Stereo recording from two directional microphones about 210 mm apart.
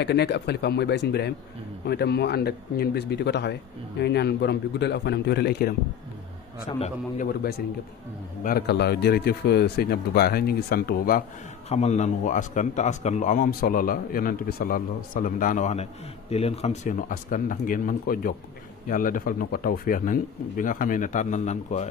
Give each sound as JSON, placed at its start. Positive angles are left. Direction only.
{"t": 0.0, "sound": "speech", "side_deg": 50}
{"t": 6.8, "sound": "speech", "side_deg": 45}
{"t": 11.7, "sound": "speech", "side_deg": 30}